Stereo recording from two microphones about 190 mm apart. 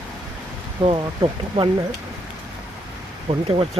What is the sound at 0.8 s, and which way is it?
Speech, 25° right (ahead or behind).